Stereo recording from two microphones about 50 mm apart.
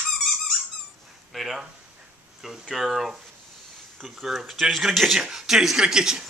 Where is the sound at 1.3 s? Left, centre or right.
Centre.